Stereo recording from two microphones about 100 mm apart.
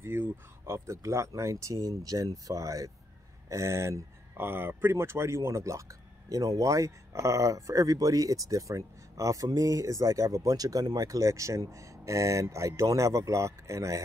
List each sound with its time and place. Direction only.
0.0 s speech: 25° right (ahead or behind)